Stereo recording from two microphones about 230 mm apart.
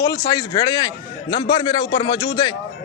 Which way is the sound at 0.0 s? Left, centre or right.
Centre.